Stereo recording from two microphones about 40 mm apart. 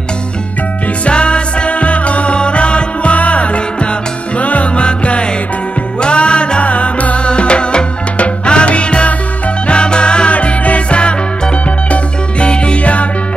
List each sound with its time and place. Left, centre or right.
1.0 s music: left